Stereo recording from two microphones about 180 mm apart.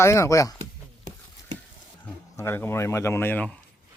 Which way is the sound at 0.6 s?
40° right (ahead or behind).